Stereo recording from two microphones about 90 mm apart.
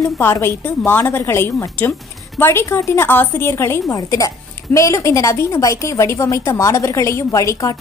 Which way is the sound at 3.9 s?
40° left (ahead or behind).